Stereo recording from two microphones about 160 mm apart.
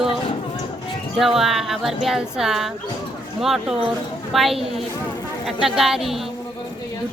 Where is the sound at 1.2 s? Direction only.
Centre (ahead or behind).